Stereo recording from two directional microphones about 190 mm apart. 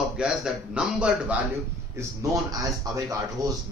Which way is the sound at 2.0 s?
15° right (ahead or behind).